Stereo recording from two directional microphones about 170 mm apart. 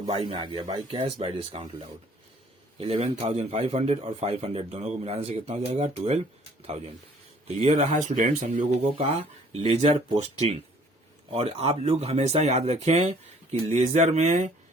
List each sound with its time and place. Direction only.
0.2 s a man's voice: 30° right (ahead or behind)
7.6 s a man's voice: 40° right (ahead or behind)
11.3 s a man's voice: 35° right (ahead or behind)